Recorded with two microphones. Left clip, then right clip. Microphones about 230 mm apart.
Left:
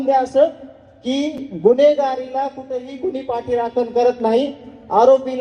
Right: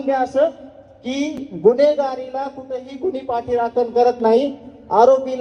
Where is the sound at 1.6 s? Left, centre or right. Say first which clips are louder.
Left 1 dB; left.